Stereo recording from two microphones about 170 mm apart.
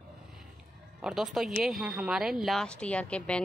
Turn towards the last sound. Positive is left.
turn(degrees=5)  # may be behind; listen again after turning